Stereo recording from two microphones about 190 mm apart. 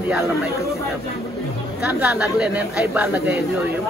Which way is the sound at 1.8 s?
10° right (ahead or behind).